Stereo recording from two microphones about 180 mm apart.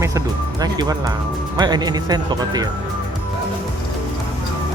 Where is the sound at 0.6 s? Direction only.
20° right (ahead or behind).